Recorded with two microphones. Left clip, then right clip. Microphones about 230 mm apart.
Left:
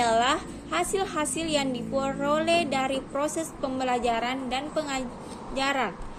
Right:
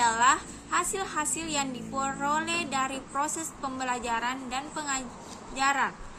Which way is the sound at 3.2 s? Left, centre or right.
Right.